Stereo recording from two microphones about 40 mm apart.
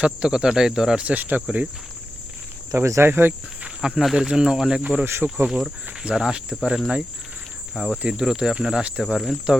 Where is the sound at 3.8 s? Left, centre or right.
Right.